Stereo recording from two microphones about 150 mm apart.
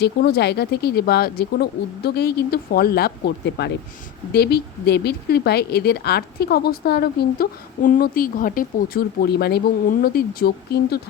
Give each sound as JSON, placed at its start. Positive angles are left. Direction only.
{"t": 0.0, "sound": "speech", "side_deg": 90}